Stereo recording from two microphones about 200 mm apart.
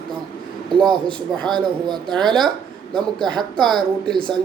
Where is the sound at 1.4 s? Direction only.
20° right (ahead or behind).